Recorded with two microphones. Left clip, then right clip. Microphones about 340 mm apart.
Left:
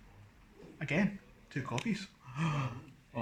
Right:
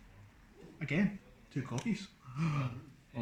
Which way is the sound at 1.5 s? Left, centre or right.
Left.